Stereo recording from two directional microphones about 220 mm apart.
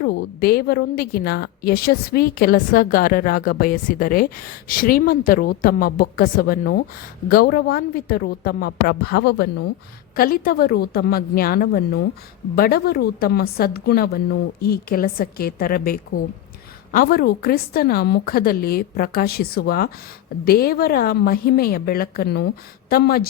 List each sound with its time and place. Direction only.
0.0 s a woman's voice: 50° left (ahead or behind)